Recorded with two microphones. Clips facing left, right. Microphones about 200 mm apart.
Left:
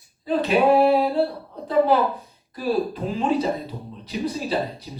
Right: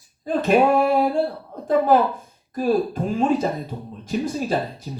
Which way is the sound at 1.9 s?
45° right (ahead or behind).